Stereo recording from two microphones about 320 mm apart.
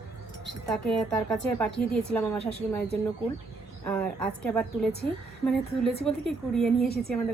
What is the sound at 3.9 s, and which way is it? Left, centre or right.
Speech, centre.